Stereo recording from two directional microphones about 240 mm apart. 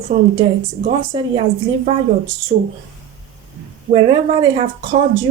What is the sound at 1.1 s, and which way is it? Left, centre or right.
Speech, right.